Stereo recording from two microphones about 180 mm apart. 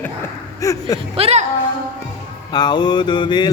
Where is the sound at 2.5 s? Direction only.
25° left (ahead or behind).